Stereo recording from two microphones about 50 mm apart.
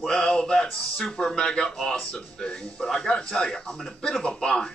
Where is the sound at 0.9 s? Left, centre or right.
Centre.